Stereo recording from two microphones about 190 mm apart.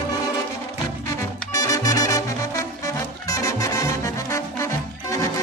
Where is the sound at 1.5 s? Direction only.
20° left (ahead or behind).